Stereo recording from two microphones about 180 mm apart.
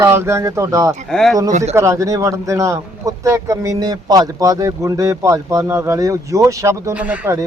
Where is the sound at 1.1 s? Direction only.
5° left (ahead or behind).